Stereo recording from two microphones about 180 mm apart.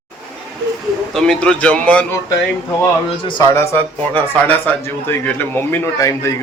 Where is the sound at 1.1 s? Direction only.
5° left (ahead or behind).